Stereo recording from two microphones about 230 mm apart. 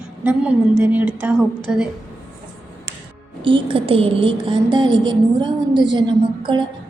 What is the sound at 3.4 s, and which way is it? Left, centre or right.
A woman's voice, right.